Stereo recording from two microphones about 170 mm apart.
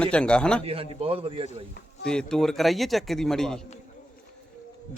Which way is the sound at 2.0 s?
5° left (ahead or behind).